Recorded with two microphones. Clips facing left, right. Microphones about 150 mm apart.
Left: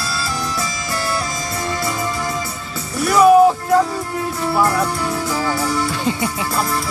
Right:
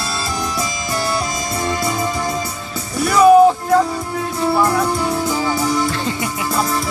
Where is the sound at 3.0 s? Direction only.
5° left (ahead or behind).